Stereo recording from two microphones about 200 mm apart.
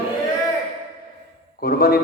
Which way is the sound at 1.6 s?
50° left (ahead or behind).